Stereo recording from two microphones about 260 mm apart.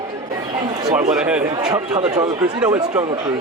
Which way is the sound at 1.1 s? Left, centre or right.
Centre.